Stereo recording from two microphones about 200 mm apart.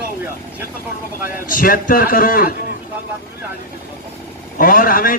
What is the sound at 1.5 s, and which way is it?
A man's voice, 45° left (ahead or behind).